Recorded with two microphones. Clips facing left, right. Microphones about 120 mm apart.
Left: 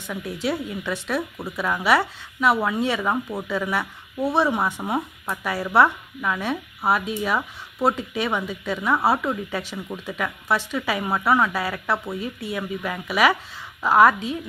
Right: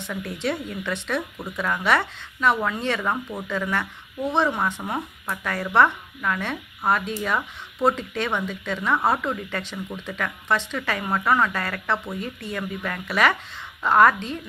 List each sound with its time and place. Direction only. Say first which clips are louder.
0.1 s a woman's voice: left 1 dB; 5° left (ahead or behind)